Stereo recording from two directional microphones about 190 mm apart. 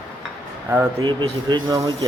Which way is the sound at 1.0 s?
25° right (ahead or behind).